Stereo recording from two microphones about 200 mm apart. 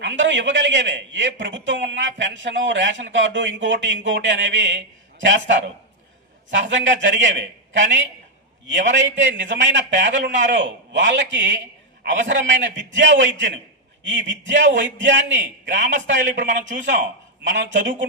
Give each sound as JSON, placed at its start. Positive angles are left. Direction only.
{"t": 0.0, "sound": "a man's voice", "side_deg": -65}